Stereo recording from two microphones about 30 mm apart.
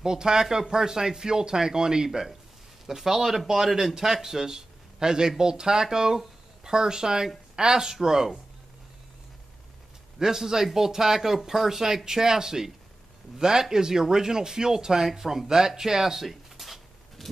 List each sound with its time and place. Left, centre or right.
0.0 s speech: right
10.1 s speech: centre
16.3 s a sound: centre